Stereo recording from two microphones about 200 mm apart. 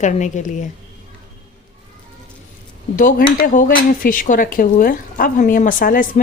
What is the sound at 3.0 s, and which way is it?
Speech, 45° left (ahead or behind).